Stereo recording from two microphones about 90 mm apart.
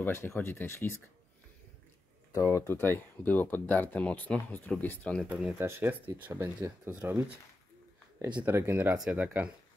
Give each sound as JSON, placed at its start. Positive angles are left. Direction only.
{"t": 0.0, "sound": "speech", "side_deg": 25}
{"t": 2.3, "sound": "speech", "side_deg": 35}
{"t": 2.8, "sound": "speech", "side_deg": 20}
{"t": 5.6, "sound": "speech", "side_deg": -25}
{"t": 8.4, "sound": "speech", "side_deg": -25}